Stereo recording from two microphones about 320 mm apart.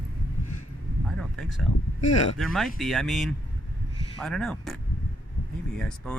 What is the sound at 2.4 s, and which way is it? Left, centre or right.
Speech, centre.